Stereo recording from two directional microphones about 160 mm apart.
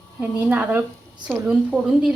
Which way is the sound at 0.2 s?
10° right (ahead or behind).